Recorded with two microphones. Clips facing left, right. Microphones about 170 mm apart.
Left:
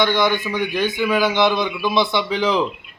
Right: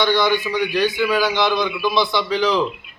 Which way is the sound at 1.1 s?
20° left (ahead or behind).